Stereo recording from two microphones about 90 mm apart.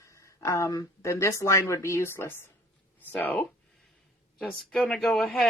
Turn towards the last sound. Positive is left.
turn(degrees=0)  # may be behind; listen again after turning